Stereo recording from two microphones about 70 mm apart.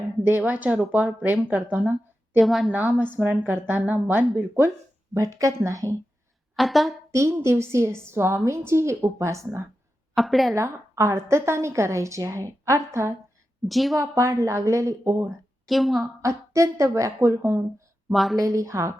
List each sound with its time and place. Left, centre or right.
0.3 s speech: right
2.4 s a woman's voice: centre
2.7 s speech: right
5.1 s a woman's voice: right
6.6 s a woman's voice: centre
7.1 s a woman's voice: right
10.2 s a woman's voice: centre
10.5 s a woman's voice: right
13.7 s a woman's voice: centre
14.0 s a woman's voice: right
15.6 s a woman's voice: centre
16.2 s a woman's voice: right
18.1 s a woman's voice: centre
18.3 s a woman's voice: right